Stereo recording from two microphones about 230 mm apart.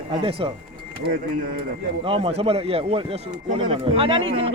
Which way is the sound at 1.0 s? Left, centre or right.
Right.